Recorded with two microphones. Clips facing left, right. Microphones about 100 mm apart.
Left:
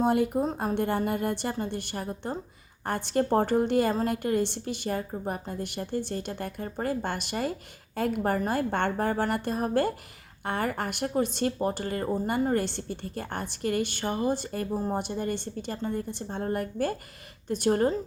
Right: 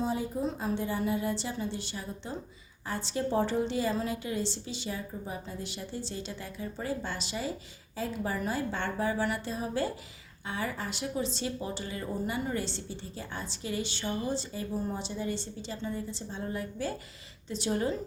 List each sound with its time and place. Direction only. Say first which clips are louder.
0.0 s speech: left 7 dB; 60° left (ahead or behind)